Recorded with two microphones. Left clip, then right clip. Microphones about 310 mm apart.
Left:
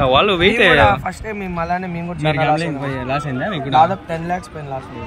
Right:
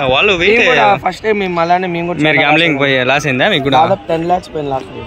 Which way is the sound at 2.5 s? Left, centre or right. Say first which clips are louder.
Right 9 dB; right.